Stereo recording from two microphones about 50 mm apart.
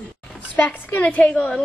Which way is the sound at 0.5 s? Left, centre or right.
Left.